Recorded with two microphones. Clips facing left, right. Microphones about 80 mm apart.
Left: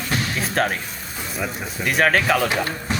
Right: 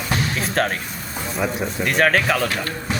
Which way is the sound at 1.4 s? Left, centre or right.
Centre.